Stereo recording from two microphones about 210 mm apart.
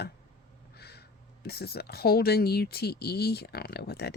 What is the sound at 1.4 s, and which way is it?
Speech, 50° left (ahead or behind).